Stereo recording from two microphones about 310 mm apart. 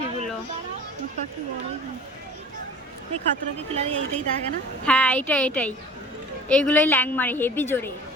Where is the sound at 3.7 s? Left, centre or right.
Centre.